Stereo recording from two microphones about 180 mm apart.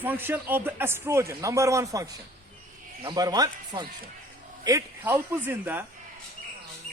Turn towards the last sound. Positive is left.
turn(degrees=-10)  # may be behind; listen again after turning